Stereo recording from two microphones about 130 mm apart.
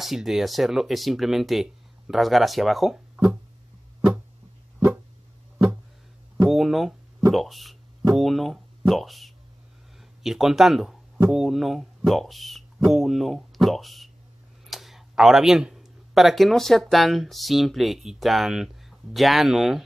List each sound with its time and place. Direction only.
0.0 s speech: centre (ahead or behind)
6.5 s a sound: centre (ahead or behind)
8.1 s speech: centre (ahead or behind)